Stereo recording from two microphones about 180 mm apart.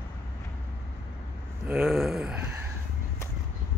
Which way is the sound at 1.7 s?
Centre (ahead or behind).